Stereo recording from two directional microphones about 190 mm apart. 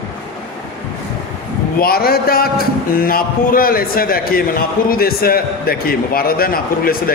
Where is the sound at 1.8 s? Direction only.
50° left (ahead or behind).